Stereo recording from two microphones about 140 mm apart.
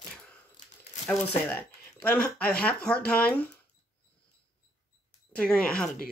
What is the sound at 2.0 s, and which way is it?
Speech, 10° left (ahead or behind).